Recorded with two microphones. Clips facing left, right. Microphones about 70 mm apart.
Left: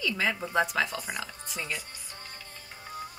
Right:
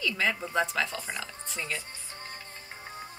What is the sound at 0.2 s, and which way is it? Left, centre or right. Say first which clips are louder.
Speech: left 1 dB; centre.